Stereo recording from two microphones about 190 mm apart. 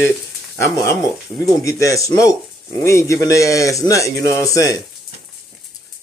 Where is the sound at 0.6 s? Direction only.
15° left (ahead or behind).